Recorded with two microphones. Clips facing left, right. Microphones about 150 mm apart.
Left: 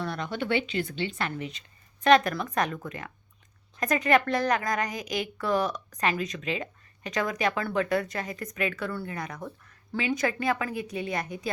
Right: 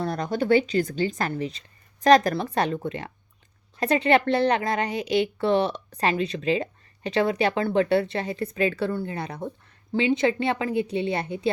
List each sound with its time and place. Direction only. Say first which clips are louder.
0.0 s a woman's voice: right 5 dB; 40° right (ahead or behind)